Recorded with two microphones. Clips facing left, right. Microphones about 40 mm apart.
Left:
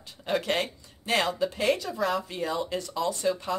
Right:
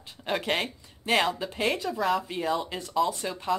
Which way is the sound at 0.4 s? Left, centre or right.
Centre.